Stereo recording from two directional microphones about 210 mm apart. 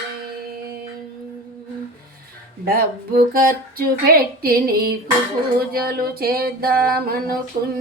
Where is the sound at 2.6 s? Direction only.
45° right (ahead or behind).